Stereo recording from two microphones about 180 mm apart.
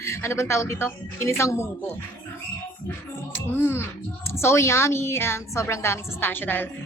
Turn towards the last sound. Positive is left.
turn(degrees=10)  # may be behind; listen again after turning